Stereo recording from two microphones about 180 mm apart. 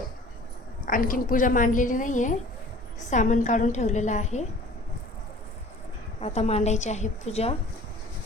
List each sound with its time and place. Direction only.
0.9 s a woman's voice: 50° left (ahead or behind)
6.1 s a woman's voice: 35° left (ahead or behind)